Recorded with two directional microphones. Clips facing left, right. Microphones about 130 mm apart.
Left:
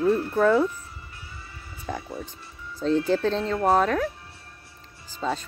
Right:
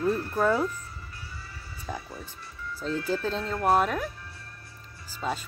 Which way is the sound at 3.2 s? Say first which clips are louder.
Left 4 dB; 5° right (ahead or behind).